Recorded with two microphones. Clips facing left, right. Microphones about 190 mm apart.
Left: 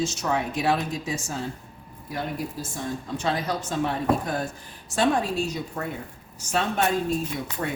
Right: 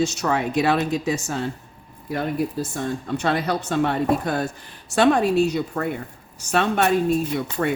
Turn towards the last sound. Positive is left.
turn(degrees=-70)  # may be behind; listen again after turning